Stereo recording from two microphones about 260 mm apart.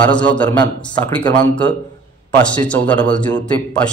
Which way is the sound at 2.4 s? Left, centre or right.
Centre.